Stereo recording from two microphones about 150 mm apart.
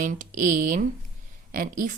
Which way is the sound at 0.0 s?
55° right (ahead or behind).